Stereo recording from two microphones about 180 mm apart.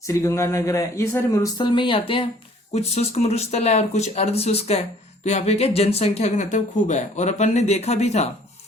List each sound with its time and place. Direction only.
0.1 s speech: 15° left (ahead or behind); by 8.3 s 40° left (ahead or behind)